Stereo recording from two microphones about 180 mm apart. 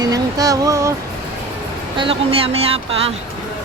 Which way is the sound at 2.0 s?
30° right (ahead or behind).